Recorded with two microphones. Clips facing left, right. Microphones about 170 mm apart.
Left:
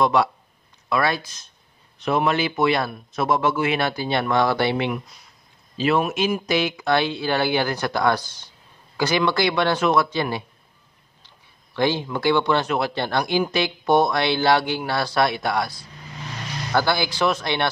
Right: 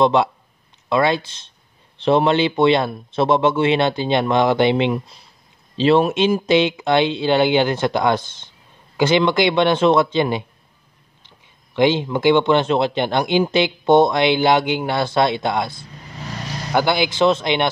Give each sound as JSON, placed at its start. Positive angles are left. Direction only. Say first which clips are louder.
{"t": 0.0, "sound": "speech", "louder": "right 4 dB", "side_deg": -25}